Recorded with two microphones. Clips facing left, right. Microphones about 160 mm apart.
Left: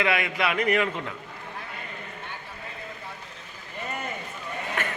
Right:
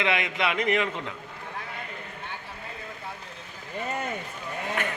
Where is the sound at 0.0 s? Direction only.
20° right (ahead or behind).